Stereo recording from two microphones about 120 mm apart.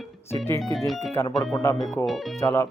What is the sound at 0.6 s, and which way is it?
Speech, centre (ahead or behind).